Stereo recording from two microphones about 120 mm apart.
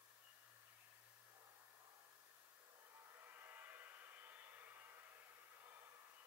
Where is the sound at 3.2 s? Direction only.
20° right (ahead or behind).